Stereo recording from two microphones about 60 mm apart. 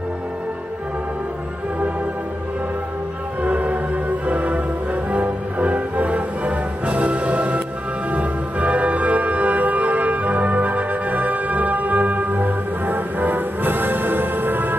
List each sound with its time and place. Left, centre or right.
3.4 s music: right